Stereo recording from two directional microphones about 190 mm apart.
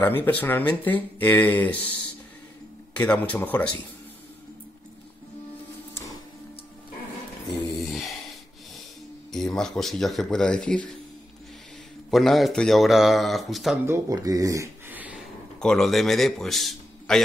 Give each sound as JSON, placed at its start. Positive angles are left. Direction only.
{"t": 0.0, "sound": "speech", "side_deg": 10}
{"t": 2.9, "sound": "speech", "side_deg": 10}
{"t": 7.7, "sound": "a sound", "side_deg": 0}
{"t": 9.3, "sound": "speech", "side_deg": 0}
{"t": 12.1, "sound": "speech", "side_deg": 0}
{"t": 13.8, "sound": "speech", "side_deg": -15}
{"t": 15.6, "sound": "a man's voice", "side_deg": 0}